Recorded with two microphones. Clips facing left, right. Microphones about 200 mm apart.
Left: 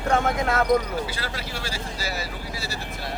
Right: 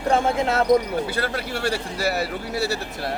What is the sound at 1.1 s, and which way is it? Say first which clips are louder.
Speech: right 7 dB; 55° right (ahead or behind).